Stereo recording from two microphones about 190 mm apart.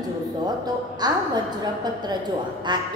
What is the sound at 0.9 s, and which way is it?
A woman's voice, 20° right (ahead or behind).